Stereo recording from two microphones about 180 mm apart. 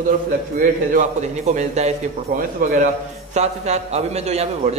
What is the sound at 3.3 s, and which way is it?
A man's voice, 40° right (ahead or behind).